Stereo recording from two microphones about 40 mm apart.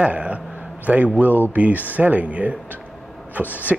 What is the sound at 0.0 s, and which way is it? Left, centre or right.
Speech, right.